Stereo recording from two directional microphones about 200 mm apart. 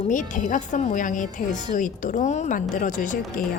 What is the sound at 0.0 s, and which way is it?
A woman's voice, 40° left (ahead or behind).